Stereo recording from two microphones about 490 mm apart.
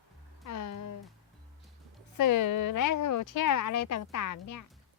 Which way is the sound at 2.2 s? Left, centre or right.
Left.